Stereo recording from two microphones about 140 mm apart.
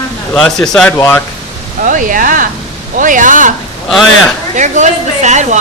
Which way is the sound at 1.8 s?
70° right (ahead or behind).